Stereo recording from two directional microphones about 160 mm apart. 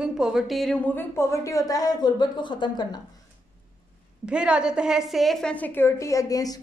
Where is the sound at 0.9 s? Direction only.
15° left (ahead or behind).